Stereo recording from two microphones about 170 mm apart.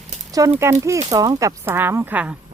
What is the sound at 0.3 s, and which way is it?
Speech, 20° right (ahead or behind).